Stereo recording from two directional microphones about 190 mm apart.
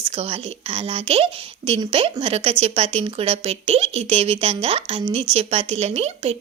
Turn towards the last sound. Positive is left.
turn(degrees=-35)  # may be behind; listen again after turning